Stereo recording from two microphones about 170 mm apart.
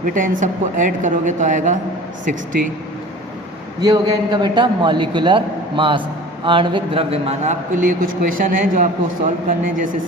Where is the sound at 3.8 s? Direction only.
25° right (ahead or behind); by 9.3 s 45° right (ahead or behind).